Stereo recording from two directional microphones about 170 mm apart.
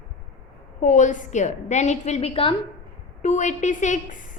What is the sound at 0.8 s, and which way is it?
A woman's voice, 45° left (ahead or behind).